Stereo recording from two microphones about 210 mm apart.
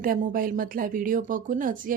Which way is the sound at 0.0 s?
40° right (ahead or behind).